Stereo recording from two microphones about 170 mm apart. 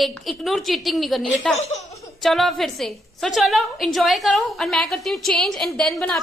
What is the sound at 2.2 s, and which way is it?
A woman's voice, centre (ahead or behind).